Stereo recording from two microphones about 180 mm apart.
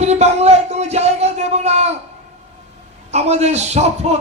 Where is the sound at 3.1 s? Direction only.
35° right (ahead or behind).